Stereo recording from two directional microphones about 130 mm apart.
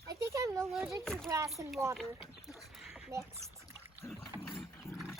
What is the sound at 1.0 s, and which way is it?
Speech, 5° left (ahead or behind).